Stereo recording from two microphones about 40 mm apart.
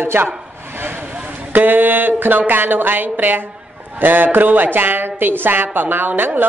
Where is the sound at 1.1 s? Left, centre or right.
Right.